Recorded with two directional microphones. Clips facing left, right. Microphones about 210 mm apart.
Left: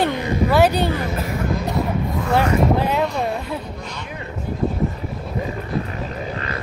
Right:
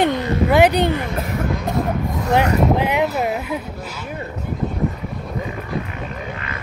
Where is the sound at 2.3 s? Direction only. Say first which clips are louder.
Right 1 dB; 15° right (ahead or behind).